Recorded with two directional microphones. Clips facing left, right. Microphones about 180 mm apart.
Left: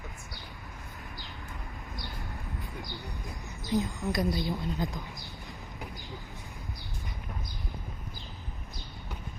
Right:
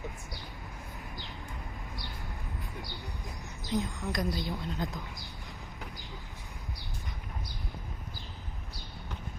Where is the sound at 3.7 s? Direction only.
5° left (ahead or behind).